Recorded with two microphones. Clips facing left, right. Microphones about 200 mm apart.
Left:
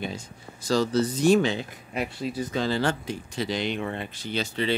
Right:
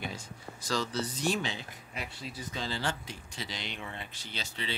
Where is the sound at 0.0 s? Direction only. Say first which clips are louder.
Left 6 dB; 25° left (ahead or behind).